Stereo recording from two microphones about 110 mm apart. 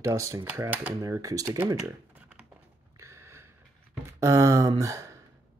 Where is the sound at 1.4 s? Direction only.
15° right (ahead or behind).